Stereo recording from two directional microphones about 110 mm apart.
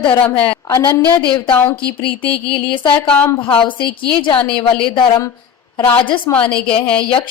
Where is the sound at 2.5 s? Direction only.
50° left (ahead or behind).